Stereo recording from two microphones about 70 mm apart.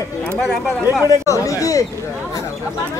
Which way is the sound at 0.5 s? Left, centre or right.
Centre.